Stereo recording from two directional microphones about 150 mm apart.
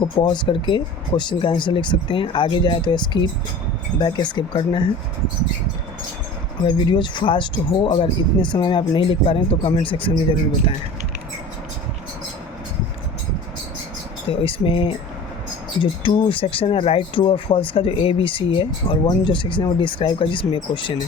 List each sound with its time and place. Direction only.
0.0 s speech: 30° left (ahead or behind)
6.7 s speech: 30° left (ahead or behind)
14.4 s speech: 35° left (ahead or behind)